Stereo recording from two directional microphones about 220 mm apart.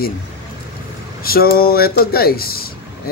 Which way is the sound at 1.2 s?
45° left (ahead or behind).